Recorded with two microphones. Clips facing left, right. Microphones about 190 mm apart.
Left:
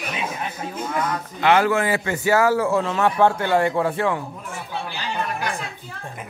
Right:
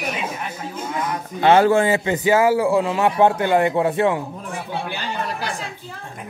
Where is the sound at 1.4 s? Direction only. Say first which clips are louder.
Right 4 dB; 30° right (ahead or behind).